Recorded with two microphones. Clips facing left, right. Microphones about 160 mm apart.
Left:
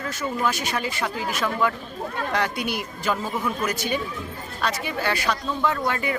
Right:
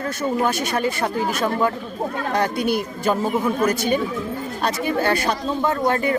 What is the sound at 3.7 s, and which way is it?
Speech, 50° right (ahead or behind).